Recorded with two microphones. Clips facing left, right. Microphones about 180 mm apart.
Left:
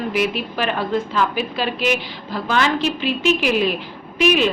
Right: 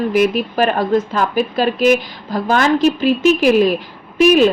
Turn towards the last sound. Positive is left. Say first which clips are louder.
# right 6 dB
turn(degrees=-45)  # may be behind; listen again after turning